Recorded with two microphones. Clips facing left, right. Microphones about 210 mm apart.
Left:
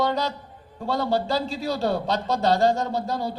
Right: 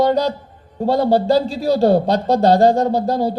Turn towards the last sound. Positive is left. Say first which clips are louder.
# right 9 dB
turn(degrees=-40)  # may be behind; listen again after turning